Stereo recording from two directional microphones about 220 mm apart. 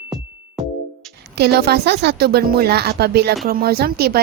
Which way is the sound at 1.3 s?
45° right (ahead or behind).